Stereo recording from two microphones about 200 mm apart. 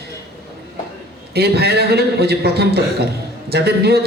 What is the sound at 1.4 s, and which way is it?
A man's voice, 55° right (ahead or behind).